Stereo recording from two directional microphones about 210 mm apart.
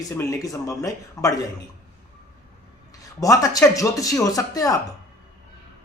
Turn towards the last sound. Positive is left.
turn(degrees=15)  # may be behind; listen again after turning